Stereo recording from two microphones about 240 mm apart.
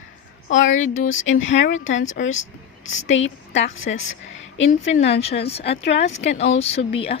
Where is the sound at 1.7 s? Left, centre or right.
Left.